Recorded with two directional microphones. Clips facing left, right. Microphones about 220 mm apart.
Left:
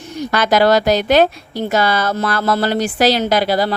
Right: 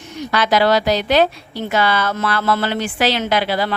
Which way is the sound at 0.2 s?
45° left (ahead or behind).